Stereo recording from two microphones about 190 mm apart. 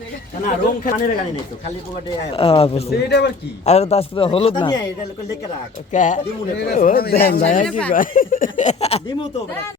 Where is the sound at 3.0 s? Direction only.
60° left (ahead or behind).